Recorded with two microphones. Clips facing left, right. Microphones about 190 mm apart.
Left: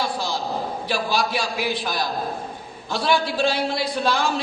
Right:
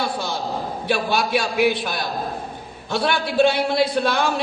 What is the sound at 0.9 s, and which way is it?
A man's voice, 60° right (ahead or behind).